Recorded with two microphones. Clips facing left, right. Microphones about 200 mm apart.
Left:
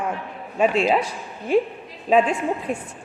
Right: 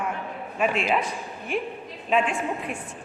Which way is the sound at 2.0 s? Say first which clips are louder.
Left 6 dB; 35° left (ahead or behind).